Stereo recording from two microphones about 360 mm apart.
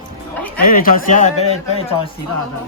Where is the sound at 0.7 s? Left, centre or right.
Left.